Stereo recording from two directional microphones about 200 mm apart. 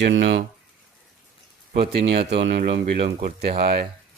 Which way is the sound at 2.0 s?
60° right (ahead or behind).